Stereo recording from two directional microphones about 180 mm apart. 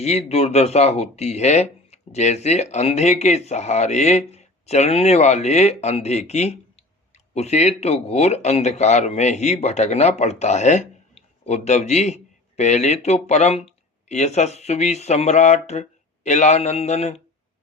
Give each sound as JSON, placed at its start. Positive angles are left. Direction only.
{"t": 0.0, "sound": "speech", "side_deg": 35}